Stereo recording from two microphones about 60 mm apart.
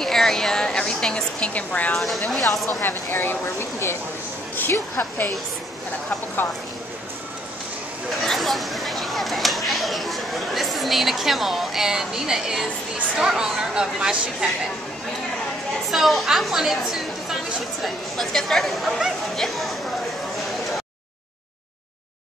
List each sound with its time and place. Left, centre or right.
0.0 s a woman's voice: centre; by 2.0 s left
2.0 s speech: centre
2.8 s speech: left
8.2 s speech: centre
15.9 s speech: centre